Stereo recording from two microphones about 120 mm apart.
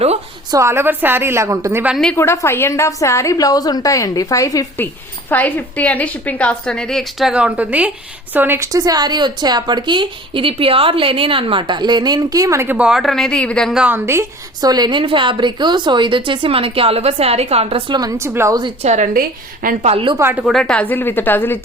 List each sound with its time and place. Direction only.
0.5 s a woman's voice: 25° right (ahead or behind)
2.1 s a woman's voice: 20° left (ahead or behind)
5.3 s a woman's voice: 15° left (ahead or behind); by 12.7 s 25° right (ahead or behind)
12.7 s speech: 5° right (ahead or behind)
13.7 s a woman's voice: 15° right (ahead or behind)
14.6 s a woman's voice: 35° right (ahead or behind)
18.8 s a woman's voice: 70° right (ahead or behind)
19.8 s a woman's voice: 50° right (ahead or behind)
20.1 s a woman's voice: 20° right (ahead or behind)
20.4 s a woman's voice: 5° left (ahead or behind)